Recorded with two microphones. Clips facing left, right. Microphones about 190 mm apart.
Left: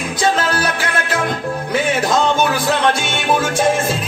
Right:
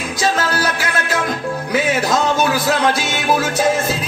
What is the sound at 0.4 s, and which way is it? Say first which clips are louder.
Music: left 1 dB; 30° left (ahead or behind).